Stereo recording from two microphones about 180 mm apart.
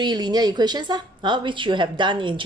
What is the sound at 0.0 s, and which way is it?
A woman's voice, 25° right (ahead or behind).